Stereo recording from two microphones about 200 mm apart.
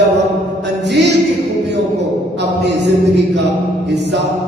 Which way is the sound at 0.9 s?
60° right (ahead or behind).